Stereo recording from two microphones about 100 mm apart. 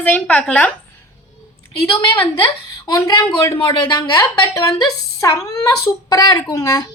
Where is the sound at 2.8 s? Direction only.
40° left (ahead or behind).